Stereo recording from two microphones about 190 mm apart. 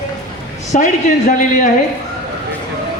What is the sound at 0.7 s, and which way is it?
Speech, 45° left (ahead or behind).